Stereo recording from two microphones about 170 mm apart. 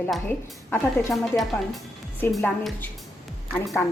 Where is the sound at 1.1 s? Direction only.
Centre (ahead or behind).